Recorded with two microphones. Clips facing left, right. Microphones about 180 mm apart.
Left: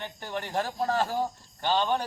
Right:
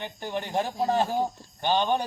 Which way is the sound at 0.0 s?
20° right (ahead or behind).